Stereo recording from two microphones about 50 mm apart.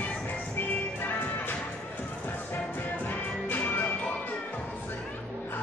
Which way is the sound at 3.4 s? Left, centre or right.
Left.